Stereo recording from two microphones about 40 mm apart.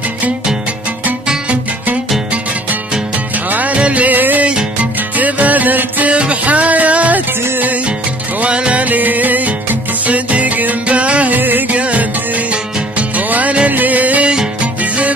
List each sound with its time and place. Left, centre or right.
3.4 s music: right
4.1 s music: right
6.1 s music: right
8.4 s music: right
8.8 s music: right
11.3 s music: right
11.7 s music: right